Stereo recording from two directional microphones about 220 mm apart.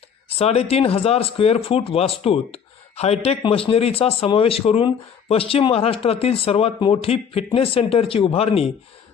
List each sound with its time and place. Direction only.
0.3 s speech: 25° left (ahead or behind)